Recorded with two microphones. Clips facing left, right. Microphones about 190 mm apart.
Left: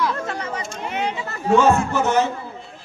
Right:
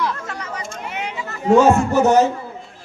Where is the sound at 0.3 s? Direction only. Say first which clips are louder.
Left 2 dB; 30° left (ahead or behind).